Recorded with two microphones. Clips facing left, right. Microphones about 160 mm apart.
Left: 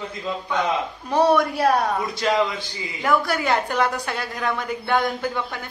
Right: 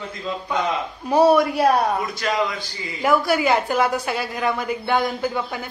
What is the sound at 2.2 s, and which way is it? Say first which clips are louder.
Speech: left 4 dB; 25° left (ahead or behind).